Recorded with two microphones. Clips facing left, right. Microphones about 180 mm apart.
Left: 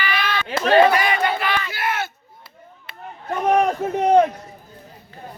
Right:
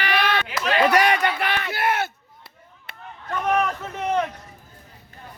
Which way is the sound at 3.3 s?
30° left (ahead or behind).